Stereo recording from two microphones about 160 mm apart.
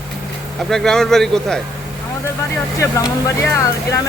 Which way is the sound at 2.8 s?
20° left (ahead or behind).